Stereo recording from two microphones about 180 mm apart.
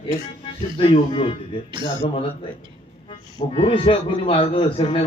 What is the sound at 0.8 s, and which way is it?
A man's voice, 30° left (ahead or behind).